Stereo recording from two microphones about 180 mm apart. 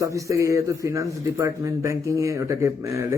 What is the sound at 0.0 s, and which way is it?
Speech, 15° right (ahead or behind).